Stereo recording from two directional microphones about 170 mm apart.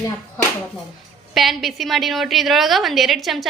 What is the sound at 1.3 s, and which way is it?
A woman's voice, centre (ahead or behind).